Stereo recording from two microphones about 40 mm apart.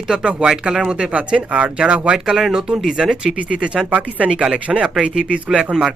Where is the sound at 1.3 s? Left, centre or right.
Right.